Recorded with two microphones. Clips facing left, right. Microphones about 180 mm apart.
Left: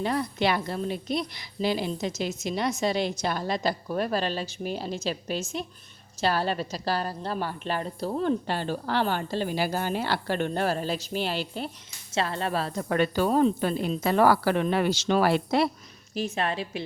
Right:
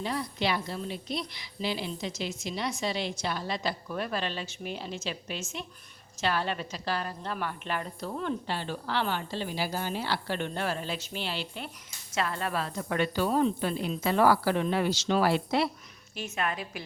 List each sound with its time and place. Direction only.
0.0 s a woman's voice: 55° left (ahead or behind)
12.1 s a woman's voice: 30° left (ahead or behind); by 15.7 s 45° left (ahead or behind)
16.1 s a woman's voice: 35° left (ahead or behind)